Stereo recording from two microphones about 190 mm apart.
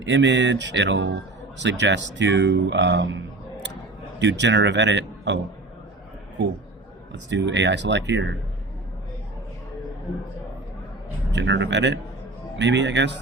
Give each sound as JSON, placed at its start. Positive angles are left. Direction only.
{"t": 0.0, "sound": "a man's voice", "side_deg": -70}
{"t": 7.1, "sound": "speech", "side_deg": -70}
{"t": 11.3, "sound": "speech", "side_deg": -70}